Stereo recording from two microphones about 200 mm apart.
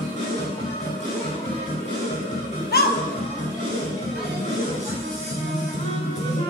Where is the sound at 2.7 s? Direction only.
55° left (ahead or behind).